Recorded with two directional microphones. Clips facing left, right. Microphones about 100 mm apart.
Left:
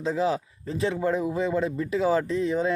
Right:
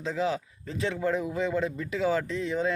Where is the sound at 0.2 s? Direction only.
30° left (ahead or behind).